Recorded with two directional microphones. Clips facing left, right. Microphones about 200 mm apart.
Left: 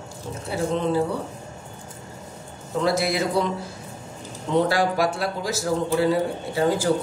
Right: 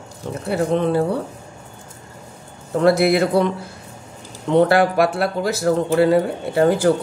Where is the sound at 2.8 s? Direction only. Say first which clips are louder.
Right 7 dB; 60° right (ahead or behind).